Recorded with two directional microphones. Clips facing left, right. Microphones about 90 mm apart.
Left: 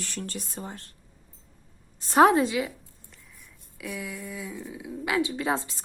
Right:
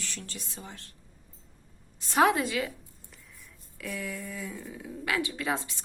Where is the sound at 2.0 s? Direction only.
35° left (ahead or behind).